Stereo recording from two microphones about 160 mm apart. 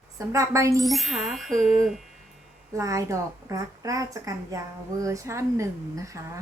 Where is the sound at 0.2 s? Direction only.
20° right (ahead or behind).